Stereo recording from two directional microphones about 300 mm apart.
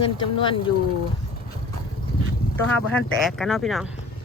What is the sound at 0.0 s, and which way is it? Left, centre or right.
Speech, centre.